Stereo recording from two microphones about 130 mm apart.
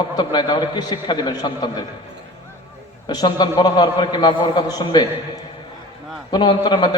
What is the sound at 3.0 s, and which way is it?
A man's voice, 35° left (ahead or behind).